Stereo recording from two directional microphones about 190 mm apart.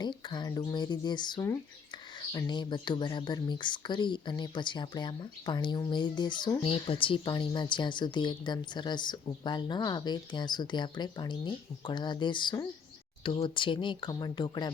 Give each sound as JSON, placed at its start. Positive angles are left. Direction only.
{"t": 0.0, "sound": "a woman's voice", "side_deg": 25}